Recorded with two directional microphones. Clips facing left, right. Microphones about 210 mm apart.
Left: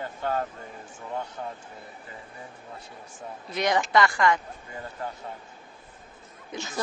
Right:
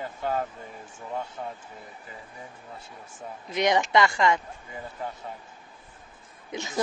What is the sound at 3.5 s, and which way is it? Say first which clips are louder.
Speech: right 1 dB; 20° right (ahead or behind).